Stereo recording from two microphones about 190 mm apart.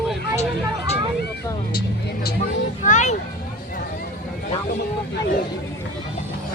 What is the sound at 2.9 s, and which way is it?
Speech, 40° left (ahead or behind).